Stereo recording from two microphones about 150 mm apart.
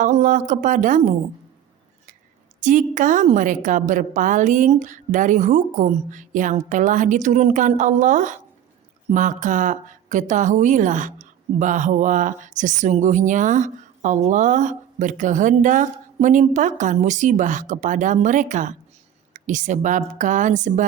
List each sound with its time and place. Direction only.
0.0 s speech: 60° right (ahead or behind)
2.6 s speech: 60° right (ahead or behind)